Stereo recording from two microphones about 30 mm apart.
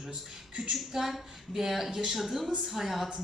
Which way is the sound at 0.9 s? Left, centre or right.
Centre.